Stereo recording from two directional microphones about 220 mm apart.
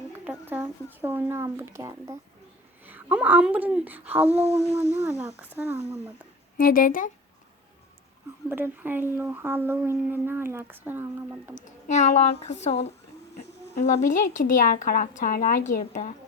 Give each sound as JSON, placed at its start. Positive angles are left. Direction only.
{"t": 0.3, "sound": "speech", "side_deg": -10}
{"t": 4.3, "sound": "a sound", "side_deg": 15}
{"t": 5.4, "sound": "speech", "side_deg": -10}
{"t": 6.6, "sound": "speech", "side_deg": 40}
{"t": 8.4, "sound": "speech", "side_deg": -10}
{"t": 11.5, "sound": "speech", "side_deg": 30}